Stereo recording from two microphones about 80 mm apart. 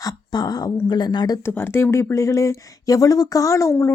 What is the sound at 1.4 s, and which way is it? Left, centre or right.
Speech, left.